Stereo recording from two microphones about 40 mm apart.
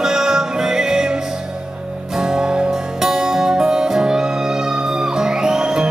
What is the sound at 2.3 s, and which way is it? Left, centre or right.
Music, centre.